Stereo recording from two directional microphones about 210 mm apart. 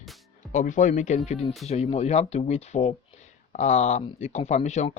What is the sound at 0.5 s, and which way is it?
Speech, 35° left (ahead or behind).